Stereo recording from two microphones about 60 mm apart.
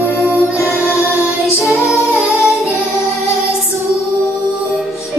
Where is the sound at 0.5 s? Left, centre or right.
Left.